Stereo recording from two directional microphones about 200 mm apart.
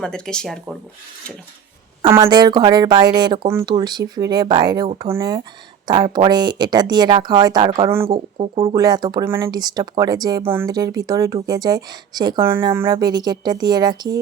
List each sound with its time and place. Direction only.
0.0 s speech: 5° left (ahead or behind)
2.0 s speech: 25° right (ahead or behind)
7.9 s speech: 10° right (ahead or behind)
8.4 s speech: 30° right (ahead or behind)
8.7 s speech: 20° right (ahead or behind)